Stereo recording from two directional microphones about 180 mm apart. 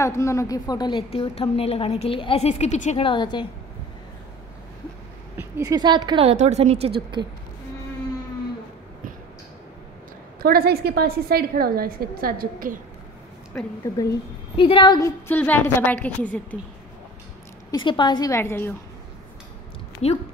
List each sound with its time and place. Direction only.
0.0 s a woman's voice: 15° left (ahead or behind); by 3.1 s 40° left (ahead or behind)
3.1 s a woman's voice: 25° left (ahead or behind)
5.4 s a woman's voice: 20° right (ahead or behind)
10.4 s a woman's voice: 60° right (ahead or behind)
13.9 s a woman's voice: 15° left (ahead or behind)
14.6 s a woman's voice: 25° left (ahead or behind); by 16.5 s 10° left (ahead or behind)
17.6 s a woman's voice: 25° left (ahead or behind)